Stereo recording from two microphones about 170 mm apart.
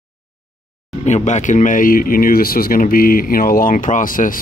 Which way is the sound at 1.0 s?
45° left (ahead or behind).